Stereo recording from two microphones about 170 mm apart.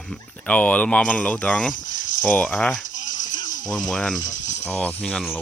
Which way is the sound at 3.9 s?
Centre (ahead or behind).